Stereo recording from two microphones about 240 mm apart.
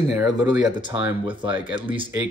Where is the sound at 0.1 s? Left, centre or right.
Centre.